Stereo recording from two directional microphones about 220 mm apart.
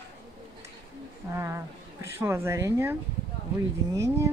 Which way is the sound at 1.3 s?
10° right (ahead or behind).